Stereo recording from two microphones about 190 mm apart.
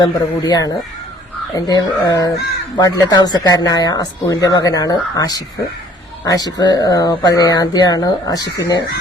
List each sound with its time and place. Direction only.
0.0 s speech: 20° left (ahead or behind)